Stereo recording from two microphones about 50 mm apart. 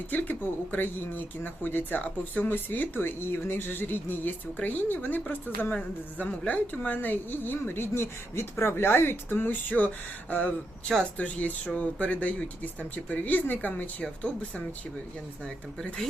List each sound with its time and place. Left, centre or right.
0.1 s speech: left
14.0 s speech: left